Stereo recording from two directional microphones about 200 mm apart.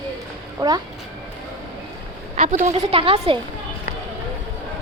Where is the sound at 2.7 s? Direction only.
30° right (ahead or behind).